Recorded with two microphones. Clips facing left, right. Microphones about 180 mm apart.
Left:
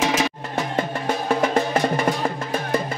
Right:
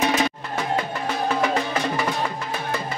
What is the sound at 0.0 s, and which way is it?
Music, 90° left.